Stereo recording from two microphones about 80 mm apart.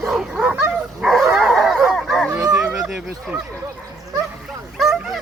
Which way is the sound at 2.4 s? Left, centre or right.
Right.